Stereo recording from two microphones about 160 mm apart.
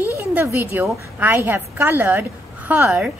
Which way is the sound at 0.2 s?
15° right (ahead or behind).